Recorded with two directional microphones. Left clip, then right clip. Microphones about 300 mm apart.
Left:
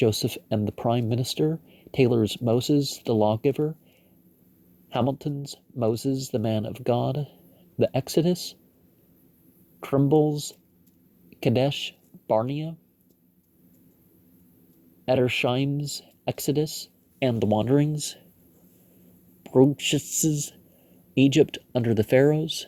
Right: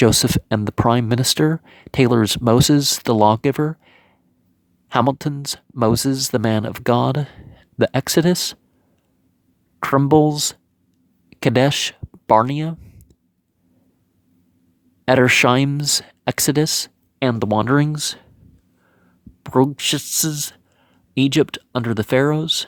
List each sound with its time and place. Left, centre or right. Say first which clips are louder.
0.0 s speech: right 8 dB; right
5.0 s speech: right 8 dB; right
10.1 s speech: right 7 dB; right
11.3 s a sound: right 7 dB; right
12.5 s speech: right 7 dB; right
15.4 s speech: right 10 dB; right
19.4 s speech: right 3 dB; right